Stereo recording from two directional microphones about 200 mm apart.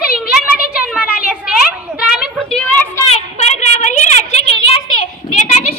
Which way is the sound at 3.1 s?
35° left (ahead or behind).